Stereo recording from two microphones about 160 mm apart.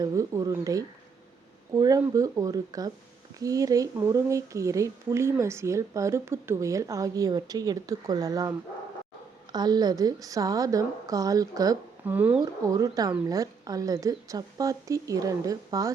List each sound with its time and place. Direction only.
0.0 s speech: 20° right (ahead or behind)
12.0 s speech: 10° right (ahead or behind)
12.4 s speech: 25° right (ahead or behind)